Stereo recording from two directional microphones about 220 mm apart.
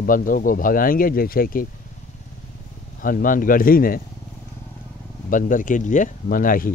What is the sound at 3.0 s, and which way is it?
Speech, 40° left (ahead or behind).